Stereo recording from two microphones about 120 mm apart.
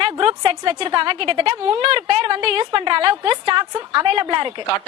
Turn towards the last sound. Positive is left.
turn(degrees=-40)  # may be behind; listen again after turning